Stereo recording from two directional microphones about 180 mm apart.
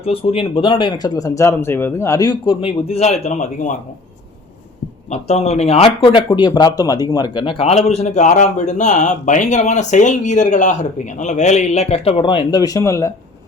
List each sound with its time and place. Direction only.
0.0 s speech: 35° left (ahead or behind)
5.0 s speech: 40° left (ahead or behind); by 13.1 s 15° left (ahead or behind)